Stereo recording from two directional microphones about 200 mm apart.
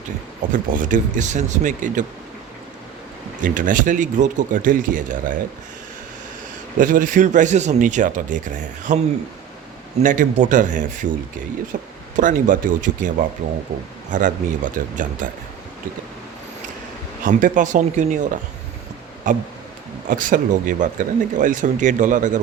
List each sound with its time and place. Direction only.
0.5 s speech: 40° right (ahead or behind)
3.4 s speech: 40° right (ahead or behind)
6.7 s speech: 40° right (ahead or behind)
10.0 s speech: 40° right (ahead or behind)
17.2 s speech: 40° right (ahead or behind)